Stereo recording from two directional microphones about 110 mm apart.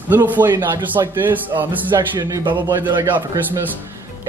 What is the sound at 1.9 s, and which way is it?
Speech, 35° right (ahead or behind).